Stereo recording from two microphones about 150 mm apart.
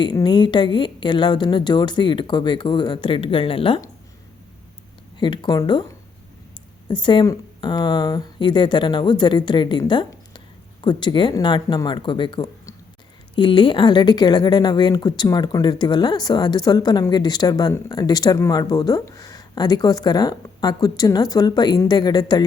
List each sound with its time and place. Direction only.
0.0 s speech: 30° left (ahead or behind)
5.1 s speech: 30° left (ahead or behind)
6.8 s speech: 30° left (ahead or behind)